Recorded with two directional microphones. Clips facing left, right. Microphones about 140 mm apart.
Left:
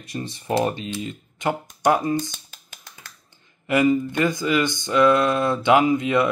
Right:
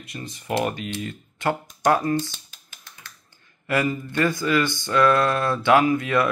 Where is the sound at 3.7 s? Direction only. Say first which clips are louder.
Left 5 dB; 20° left (ahead or behind).